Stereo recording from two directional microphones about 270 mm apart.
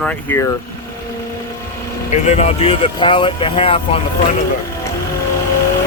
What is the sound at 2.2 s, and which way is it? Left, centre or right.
Speech, left.